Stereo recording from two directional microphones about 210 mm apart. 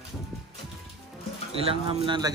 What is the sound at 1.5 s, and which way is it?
Speech, 25° right (ahead or behind).